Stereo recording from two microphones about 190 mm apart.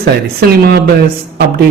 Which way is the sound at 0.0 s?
60° right (ahead or behind).